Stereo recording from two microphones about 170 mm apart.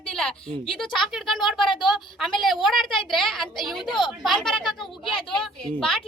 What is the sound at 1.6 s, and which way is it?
Speech, 30° left (ahead or behind).